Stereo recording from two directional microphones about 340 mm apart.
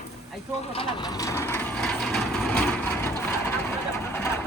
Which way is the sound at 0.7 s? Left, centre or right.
Centre.